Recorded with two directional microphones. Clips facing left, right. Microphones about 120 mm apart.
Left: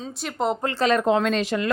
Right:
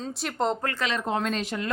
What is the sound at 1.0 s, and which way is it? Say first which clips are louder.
Speech: left 7 dB; 90° left.